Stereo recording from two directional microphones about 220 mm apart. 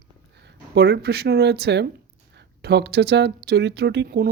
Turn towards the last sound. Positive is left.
turn(degrees=-45)  # may be behind; listen again after turning